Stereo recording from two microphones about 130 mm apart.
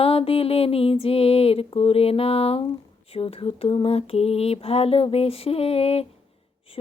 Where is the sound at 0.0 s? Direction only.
50° left (ahead or behind).